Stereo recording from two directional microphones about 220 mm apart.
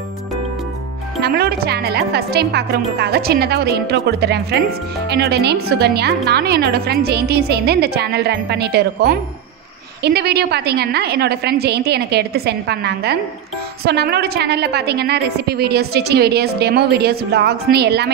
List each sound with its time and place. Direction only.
1.2 s a woman's voice: 45° right (ahead or behind)